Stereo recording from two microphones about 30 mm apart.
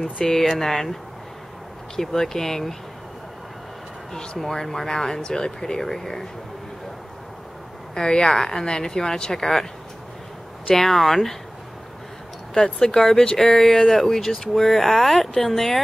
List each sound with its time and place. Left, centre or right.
0.0 s speech: centre
2.0 s speech: centre
4.4 s speech: centre
7.9 s a woman's voice: left
10.7 s speech: centre
12.5 s a woman's voice: centre
13.2 s a woman's voice: left
14.0 s speech: centre